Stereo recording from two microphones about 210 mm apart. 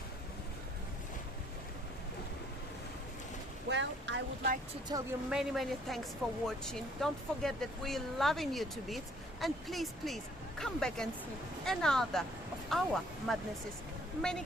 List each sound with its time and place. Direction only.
3.7 s boat: 55° right (ahead or behind)
4.9 s speech: 20° right (ahead or behind)
5.3 s speech: centre (ahead or behind)